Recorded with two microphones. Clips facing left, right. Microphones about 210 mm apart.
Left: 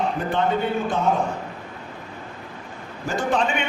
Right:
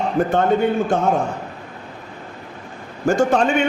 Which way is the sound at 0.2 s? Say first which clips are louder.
Right 8 dB; 45° right (ahead or behind).